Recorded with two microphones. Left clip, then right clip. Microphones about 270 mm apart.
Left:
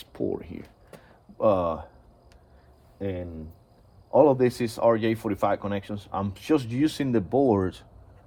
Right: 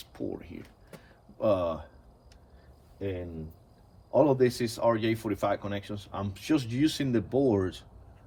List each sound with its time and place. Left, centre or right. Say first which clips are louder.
0.0 s a sound: left 7 dB; left
1.4 s speech: left 4 dB; left
4.1 s speech: left 4 dB; left